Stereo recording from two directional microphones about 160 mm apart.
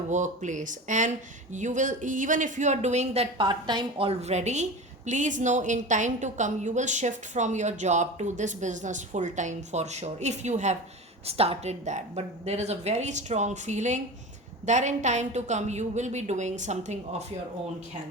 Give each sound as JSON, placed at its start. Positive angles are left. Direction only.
{"t": 0.1, "sound": "a woman's voice", "side_deg": -50}